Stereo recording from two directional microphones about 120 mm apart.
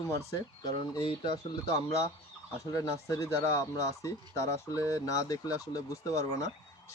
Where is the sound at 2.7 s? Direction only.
30° left (ahead or behind).